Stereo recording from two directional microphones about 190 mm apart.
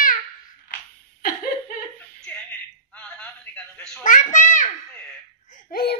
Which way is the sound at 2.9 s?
5° left (ahead or behind).